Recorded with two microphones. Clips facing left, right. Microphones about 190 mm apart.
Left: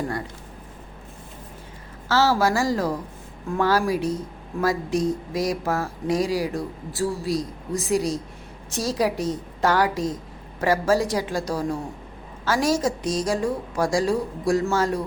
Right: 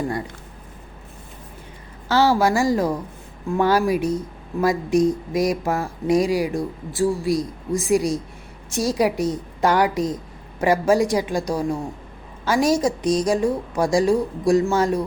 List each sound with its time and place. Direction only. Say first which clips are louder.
2.0 s a woman's voice: right 3 dB; 15° right (ahead or behind)